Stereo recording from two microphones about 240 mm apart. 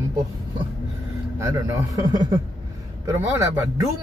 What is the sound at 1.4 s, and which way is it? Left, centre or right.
Speech, centre.